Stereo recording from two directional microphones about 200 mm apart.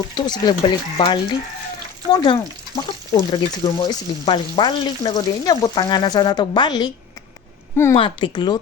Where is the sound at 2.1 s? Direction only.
20° left (ahead or behind).